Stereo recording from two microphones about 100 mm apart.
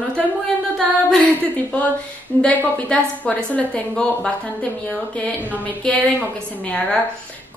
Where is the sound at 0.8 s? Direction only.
5° left (ahead or behind).